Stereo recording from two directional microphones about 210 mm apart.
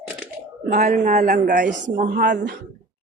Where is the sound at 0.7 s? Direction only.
45° right (ahead or behind).